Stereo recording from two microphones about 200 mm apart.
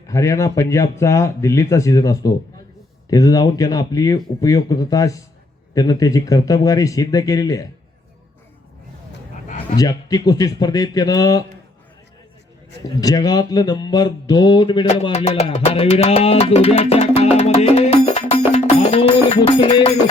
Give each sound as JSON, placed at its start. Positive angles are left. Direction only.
{"t": 0.1, "sound": "speech", "side_deg": 15}
{"t": 9.7, "sound": "speech", "side_deg": 20}
{"t": 13.0, "sound": "speech", "side_deg": 20}
{"t": 17.3, "sound": "music", "side_deg": 30}